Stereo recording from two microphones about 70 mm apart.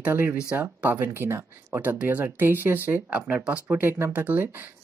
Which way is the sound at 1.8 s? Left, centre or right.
Right.